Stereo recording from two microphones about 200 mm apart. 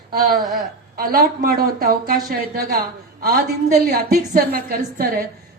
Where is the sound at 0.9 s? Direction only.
45° right (ahead or behind).